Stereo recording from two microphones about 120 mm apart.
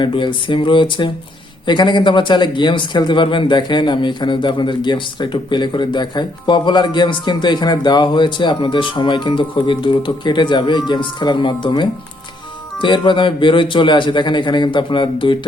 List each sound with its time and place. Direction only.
0.0 s speech: 40° left (ahead or behind)